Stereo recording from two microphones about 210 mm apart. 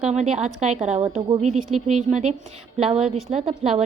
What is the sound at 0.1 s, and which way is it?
A woman's voice, 30° right (ahead or behind).